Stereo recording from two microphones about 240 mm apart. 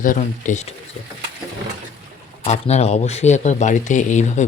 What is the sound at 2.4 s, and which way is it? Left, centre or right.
Speech, left.